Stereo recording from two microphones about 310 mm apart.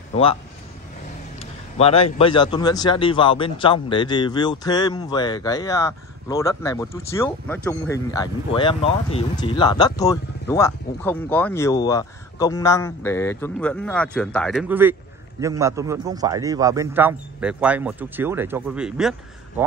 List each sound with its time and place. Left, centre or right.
0.1 s speech: centre
1.4 s a sound: centre
2.1 s a man's voice: centre